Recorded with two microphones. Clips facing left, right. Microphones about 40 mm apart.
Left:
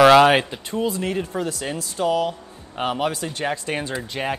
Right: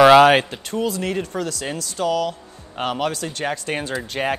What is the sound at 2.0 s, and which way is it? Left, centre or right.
Speech, left.